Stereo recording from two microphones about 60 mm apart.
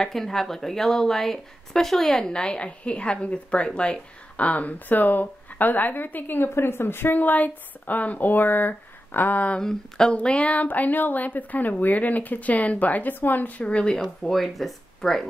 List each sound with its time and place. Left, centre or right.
0.0 s speech: centre; by 9.6 s left
9.6 s speech: centre
10.1 s speech: left
13.9 s speech: centre